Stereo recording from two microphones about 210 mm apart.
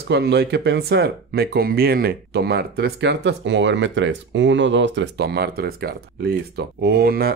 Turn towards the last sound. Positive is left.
turn(degrees=-45)  # may be behind; listen again after turning